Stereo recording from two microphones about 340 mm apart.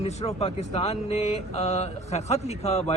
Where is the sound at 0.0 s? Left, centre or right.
Centre.